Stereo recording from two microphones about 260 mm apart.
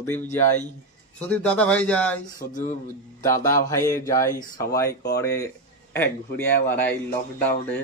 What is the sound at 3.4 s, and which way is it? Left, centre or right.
A man's voice, centre.